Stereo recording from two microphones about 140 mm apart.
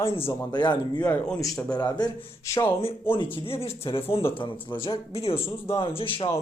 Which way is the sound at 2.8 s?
40° left (ahead or behind).